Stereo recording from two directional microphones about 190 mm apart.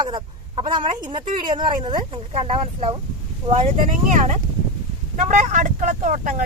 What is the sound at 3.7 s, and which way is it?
Speech, 40° right (ahead or behind).